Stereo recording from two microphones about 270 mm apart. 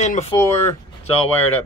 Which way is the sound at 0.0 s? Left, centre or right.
Left.